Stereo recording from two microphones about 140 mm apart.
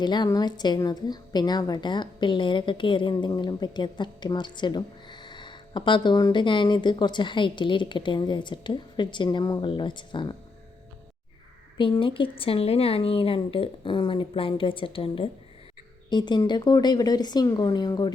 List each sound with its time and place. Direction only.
0.0 s a woman's voice: 30° left (ahead or behind)
11.8 s a woman's voice: 35° left (ahead or behind)